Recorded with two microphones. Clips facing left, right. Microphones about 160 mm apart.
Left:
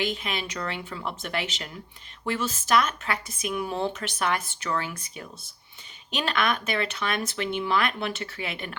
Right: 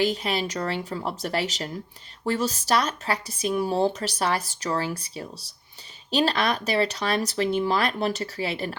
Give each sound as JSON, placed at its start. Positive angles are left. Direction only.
{"t": 0.0, "sound": "speech", "side_deg": -35}